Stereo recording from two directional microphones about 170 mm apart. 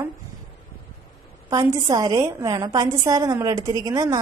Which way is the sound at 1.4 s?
20° right (ahead or behind).